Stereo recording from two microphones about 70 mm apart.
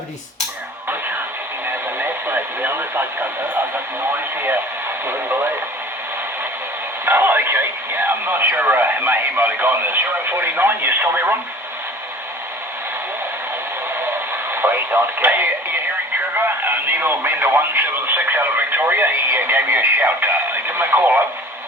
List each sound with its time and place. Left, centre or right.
2.0 s speech: right
5.0 s speech: right
7.0 s speech: right
14.5 s speech: right
16.6 s speech: right